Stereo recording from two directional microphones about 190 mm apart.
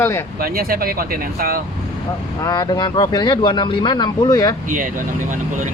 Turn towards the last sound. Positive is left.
turn(degrees=-45)  # may be behind; listen again after turning